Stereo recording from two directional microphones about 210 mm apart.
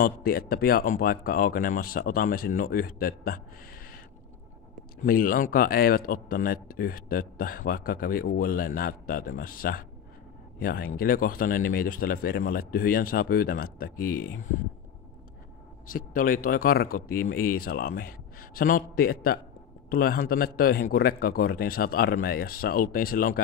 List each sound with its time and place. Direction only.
0.0 s speech: 45° left (ahead or behind)
5.0 s speech: 40° left (ahead or behind)
15.9 s speech: 40° left (ahead or behind)